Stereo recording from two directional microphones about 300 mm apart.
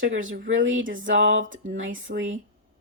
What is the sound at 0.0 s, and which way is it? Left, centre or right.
Speech, right.